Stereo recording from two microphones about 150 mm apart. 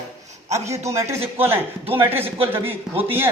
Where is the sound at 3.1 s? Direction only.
15° right (ahead or behind).